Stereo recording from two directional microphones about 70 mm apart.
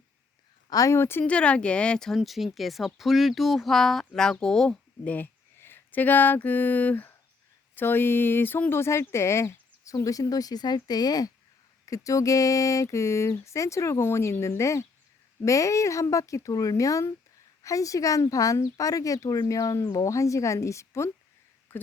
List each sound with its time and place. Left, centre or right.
0.7 s speech: left
0.9 s speech: left
1.3 s speech: centre
2.1 s speech: centre
5.0 s speech: left
11.9 s speech: left
21.7 s speech: left